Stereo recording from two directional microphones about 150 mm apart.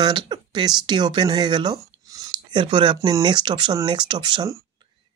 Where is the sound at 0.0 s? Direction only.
30° right (ahead or behind).